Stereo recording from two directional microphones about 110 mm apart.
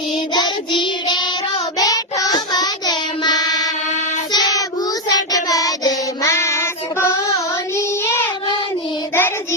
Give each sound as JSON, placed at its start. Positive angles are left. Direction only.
{"t": 0.3, "sound": "child singing", "side_deg": 45}